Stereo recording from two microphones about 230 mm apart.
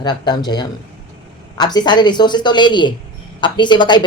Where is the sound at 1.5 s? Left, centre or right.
Centre.